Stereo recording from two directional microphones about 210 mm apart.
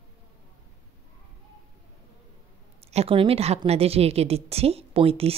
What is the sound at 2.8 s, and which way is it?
A woman's voice, 30° right (ahead or behind).